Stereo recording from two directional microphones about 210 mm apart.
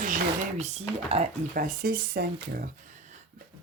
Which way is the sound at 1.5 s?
40° right (ahead or behind).